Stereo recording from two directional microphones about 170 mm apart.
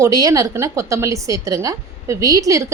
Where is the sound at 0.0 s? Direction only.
20° right (ahead or behind).